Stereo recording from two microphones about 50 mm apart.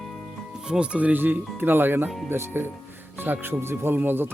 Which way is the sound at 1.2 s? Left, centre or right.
Right.